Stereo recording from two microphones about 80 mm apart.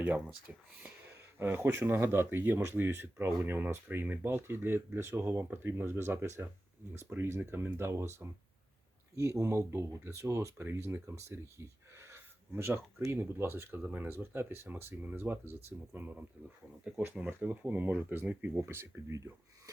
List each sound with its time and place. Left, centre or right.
0.0 s speech: centre
1.1 s speech: right